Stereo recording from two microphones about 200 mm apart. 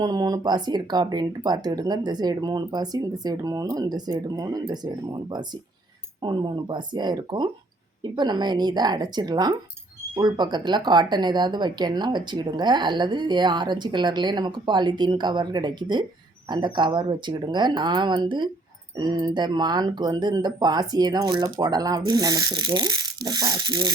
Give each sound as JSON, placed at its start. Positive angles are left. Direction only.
{"t": 0.0, "sound": "speech", "side_deg": -20}